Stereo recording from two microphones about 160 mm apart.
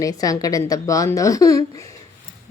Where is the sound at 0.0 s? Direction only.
20° left (ahead or behind).